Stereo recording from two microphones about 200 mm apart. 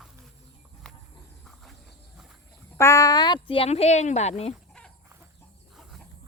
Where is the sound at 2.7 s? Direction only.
15° left (ahead or behind); by 4.5 s 30° left (ahead or behind).